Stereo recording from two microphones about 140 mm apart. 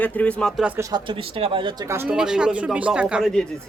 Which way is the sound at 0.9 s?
40° right (ahead or behind).